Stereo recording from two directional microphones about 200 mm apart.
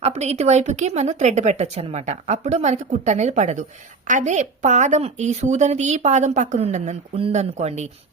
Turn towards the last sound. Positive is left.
turn(degrees=-35)  # may be behind; listen again after turning